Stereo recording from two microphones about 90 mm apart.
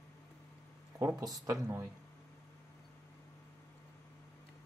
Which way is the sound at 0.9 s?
35° right (ahead or behind).